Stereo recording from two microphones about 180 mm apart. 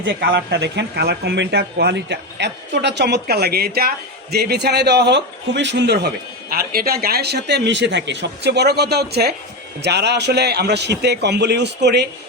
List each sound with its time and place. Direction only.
0.0 s speech: 60° right (ahead or behind)
6.5 s speech: 55° right (ahead or behind); by 12.0 s 70° right (ahead or behind)